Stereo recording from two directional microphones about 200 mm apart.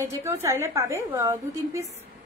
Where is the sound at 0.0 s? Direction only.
15° right (ahead or behind).